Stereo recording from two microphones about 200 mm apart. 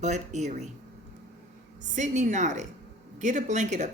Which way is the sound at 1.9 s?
35° right (ahead or behind).